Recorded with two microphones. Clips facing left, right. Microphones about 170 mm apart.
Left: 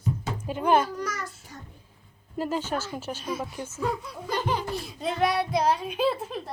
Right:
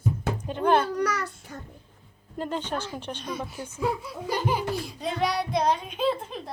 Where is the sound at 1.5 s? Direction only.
60° right (ahead or behind).